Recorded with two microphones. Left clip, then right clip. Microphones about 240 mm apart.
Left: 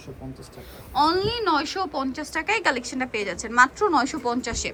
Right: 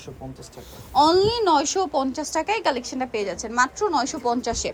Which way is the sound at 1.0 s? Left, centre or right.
Centre.